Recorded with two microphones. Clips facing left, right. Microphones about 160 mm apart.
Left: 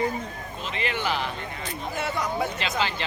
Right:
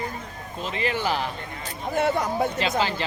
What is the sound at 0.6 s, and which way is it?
Speech, 40° right (ahead or behind).